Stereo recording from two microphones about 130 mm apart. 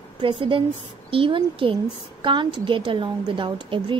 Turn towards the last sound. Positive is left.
turn(degrees=-40)  # may be behind; listen again after turning